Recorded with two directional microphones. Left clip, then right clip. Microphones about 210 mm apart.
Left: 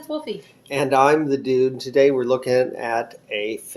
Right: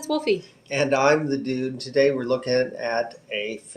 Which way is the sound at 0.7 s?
35° left (ahead or behind).